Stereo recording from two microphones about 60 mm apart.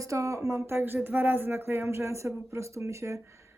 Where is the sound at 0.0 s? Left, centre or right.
Right.